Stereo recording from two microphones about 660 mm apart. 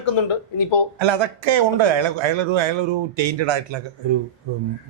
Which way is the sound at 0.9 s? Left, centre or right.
Right.